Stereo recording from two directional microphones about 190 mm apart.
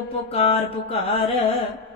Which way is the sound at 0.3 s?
30° left (ahead or behind).